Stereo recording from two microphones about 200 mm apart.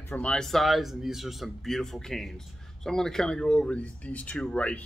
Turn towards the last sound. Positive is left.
turn(degrees=5)  # may be behind; listen again after turning